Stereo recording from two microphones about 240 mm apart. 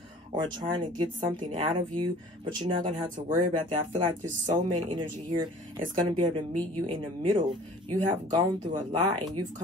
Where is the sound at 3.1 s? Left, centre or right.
Right.